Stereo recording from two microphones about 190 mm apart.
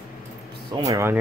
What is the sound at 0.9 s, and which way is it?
Speech, 15° right (ahead or behind).